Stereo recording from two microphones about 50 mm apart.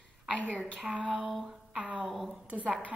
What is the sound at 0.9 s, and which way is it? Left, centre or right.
Speech, centre.